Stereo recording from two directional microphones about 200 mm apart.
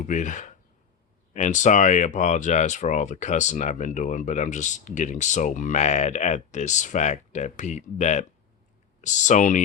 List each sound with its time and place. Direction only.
0.1 s speech: 40° left (ahead or behind)